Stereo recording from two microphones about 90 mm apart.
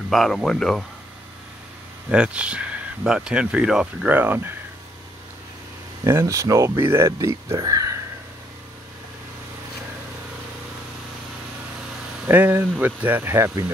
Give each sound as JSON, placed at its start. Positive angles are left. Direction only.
{"t": 0.1, "sound": "speech", "side_deg": 0}
{"t": 2.0, "sound": "speech", "side_deg": -10}
{"t": 6.0, "sound": "speech", "side_deg": -30}
{"t": 12.3, "sound": "speech", "side_deg": -20}